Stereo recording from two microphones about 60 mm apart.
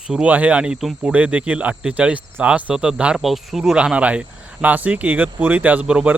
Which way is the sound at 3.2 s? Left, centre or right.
Centre.